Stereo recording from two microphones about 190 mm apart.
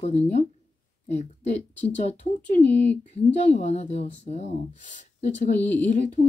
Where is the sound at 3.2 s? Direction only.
35° left (ahead or behind).